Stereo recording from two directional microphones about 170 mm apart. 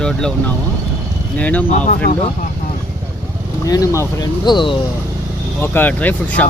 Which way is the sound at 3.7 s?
20° left (ahead or behind).